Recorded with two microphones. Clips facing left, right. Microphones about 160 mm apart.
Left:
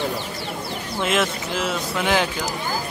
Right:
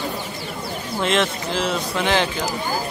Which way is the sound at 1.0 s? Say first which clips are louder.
Right 1 dB; 5° left (ahead or behind).